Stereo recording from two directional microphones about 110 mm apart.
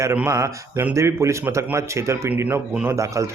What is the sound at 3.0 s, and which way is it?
Speech, 30° right (ahead or behind).